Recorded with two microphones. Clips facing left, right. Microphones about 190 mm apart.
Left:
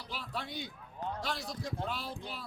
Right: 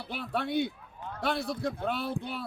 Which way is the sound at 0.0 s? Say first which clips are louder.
Right 8 dB; 60° right (ahead or behind).